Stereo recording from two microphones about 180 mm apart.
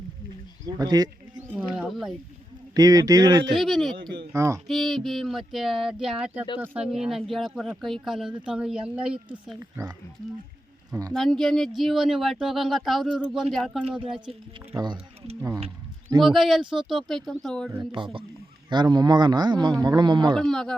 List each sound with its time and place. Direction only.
0.8 s speech: 20° right (ahead or behind)
1.5 s speech: 5° right (ahead or behind)
2.7 s speech: 20° right (ahead or behind)
3.5 s speech: centre (ahead or behind)
4.3 s a child's voice: 15° right (ahead or behind)
4.7 s a child's voice: centre (ahead or behind); by 9.9 s 15° right (ahead or behind)
11.1 s speech: centre (ahead or behind)
14.7 s a child's voice: 20° right (ahead or behind)
16.2 s speech: centre (ahead or behind)
17.7 s speech: 25° right (ahead or behind)
20.3 s speech: centre (ahead or behind)